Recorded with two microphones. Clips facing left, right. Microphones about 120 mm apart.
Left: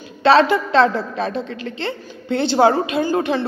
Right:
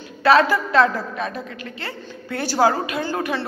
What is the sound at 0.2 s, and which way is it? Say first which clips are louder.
Speech: left 2 dB; 25° left (ahead or behind).